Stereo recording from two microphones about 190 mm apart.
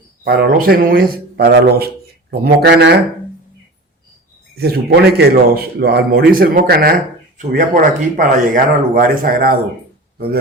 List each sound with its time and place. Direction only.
0.3 s a man's voice: 50° right (ahead or behind)
4.5 s a man's voice: 55° right (ahead or behind)
7.3 s speech: 40° right (ahead or behind)